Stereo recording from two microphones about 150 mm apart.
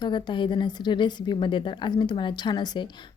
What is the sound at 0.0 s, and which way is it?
Speech, 30° left (ahead or behind).